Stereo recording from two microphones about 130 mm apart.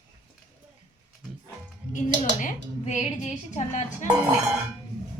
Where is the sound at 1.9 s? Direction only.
75° left (ahead or behind); by 4.0 s 60° left (ahead or behind).